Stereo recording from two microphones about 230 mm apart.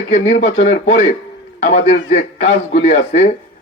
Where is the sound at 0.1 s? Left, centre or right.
Left.